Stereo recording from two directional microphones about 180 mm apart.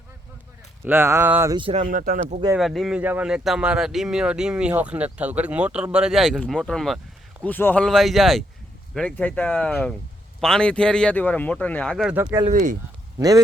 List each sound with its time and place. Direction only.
0.9 s speech: 15° right (ahead or behind)
1.7 s speech: 45° right (ahead or behind)
2.6 s speech: centre (ahead or behind)
12.3 s speech: 15° right (ahead or behind)